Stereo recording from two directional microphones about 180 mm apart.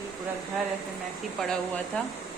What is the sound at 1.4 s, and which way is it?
Speech, 5° left (ahead or behind).